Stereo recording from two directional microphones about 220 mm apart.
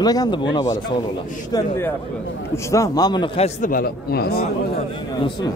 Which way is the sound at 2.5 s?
15° left (ahead or behind).